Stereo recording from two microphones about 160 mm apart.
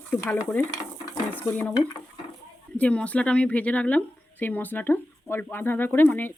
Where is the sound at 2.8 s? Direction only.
10° left (ahead or behind).